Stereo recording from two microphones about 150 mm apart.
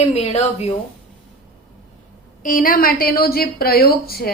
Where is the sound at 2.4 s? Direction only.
65° left (ahead or behind); by 4.3 s 90° left.